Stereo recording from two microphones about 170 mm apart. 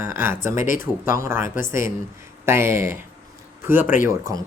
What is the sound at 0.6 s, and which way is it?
Speech, 50° left (ahead or behind).